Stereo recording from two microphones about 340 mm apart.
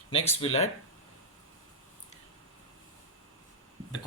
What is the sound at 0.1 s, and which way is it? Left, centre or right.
Speech, centre.